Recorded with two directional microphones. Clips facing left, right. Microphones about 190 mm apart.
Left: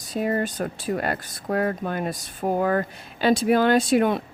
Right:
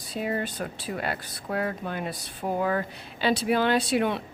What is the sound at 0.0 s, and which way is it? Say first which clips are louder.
Speech: left 5 dB; 45° left (ahead or behind).